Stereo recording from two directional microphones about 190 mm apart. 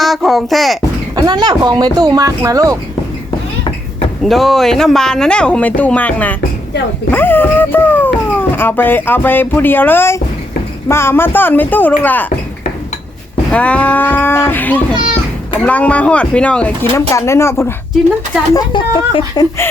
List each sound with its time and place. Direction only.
0.0 s speech: centre (ahead or behind)
1.1 s speech: 20° right (ahead or behind)
4.2 s speech: centre (ahead or behind)
13.5 s speech: 5° left (ahead or behind)
18.5 s speech: 25° left (ahead or behind)